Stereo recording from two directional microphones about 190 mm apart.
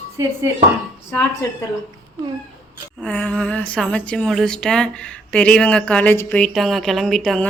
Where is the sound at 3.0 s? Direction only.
5° left (ahead or behind).